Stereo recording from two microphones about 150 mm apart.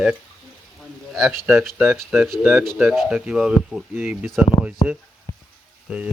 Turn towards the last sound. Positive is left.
turn(degrees=-10)  # may be behind; listen again after turning